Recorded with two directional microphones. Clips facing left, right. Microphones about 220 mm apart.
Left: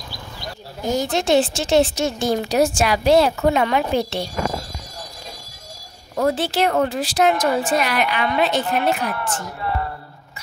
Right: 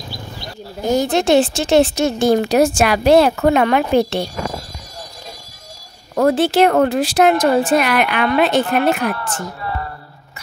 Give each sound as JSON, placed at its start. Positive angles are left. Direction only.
{"t": 1.1, "sound": "a woman's voice", "side_deg": -60}
{"t": 6.1, "sound": "a woman's voice", "side_deg": -60}